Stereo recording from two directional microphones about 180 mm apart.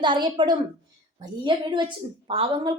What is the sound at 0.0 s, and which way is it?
A woman's voice, 25° right (ahead or behind).